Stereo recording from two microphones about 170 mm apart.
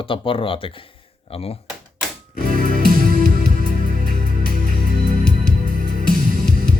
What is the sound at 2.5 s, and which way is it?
Music, 55° right (ahead or behind).